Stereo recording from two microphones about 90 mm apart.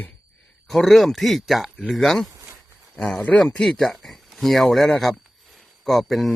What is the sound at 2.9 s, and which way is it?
Speech, 10° left (ahead or behind).